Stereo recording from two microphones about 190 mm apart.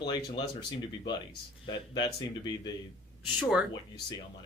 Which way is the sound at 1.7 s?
20° left (ahead or behind).